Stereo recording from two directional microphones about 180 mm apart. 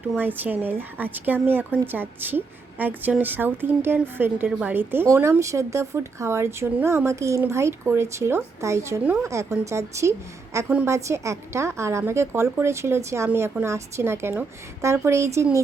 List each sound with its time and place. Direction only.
0.1 s a woman's voice: 10° right (ahead or behind)